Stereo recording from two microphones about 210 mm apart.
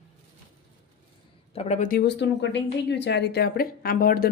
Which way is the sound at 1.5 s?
30° left (ahead or behind).